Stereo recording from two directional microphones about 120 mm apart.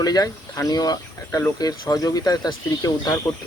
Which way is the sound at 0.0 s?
30° left (ahead or behind).